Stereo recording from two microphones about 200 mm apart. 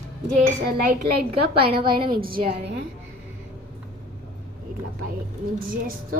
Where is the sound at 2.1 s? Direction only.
45° right (ahead or behind).